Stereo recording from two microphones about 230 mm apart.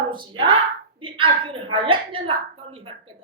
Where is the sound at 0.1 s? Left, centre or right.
Right.